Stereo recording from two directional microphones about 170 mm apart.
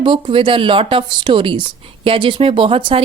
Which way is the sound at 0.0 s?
30° right (ahead or behind).